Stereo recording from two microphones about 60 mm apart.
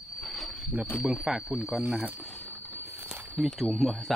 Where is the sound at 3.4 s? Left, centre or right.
Centre.